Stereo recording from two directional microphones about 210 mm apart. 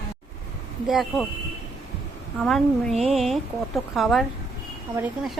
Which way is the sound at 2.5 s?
Centre (ahead or behind).